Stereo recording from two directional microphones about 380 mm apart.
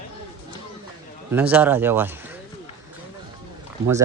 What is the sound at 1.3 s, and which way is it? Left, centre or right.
Speech, centre.